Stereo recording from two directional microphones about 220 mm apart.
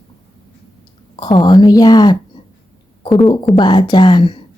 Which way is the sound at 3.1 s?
Centre (ahead or behind).